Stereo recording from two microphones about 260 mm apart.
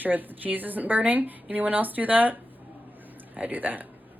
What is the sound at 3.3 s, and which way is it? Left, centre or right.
Speech, centre.